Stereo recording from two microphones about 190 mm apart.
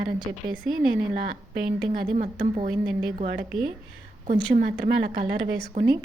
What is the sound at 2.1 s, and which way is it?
Speech, 35° right (ahead or behind).